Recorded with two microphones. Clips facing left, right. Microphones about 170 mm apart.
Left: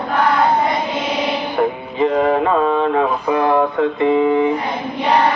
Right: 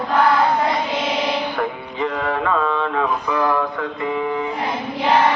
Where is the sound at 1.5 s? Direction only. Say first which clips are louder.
Left 6 dB; 20° left (ahead or behind).